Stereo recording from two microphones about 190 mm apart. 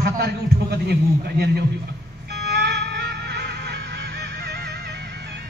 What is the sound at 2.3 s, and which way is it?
Music, 65° right (ahead or behind).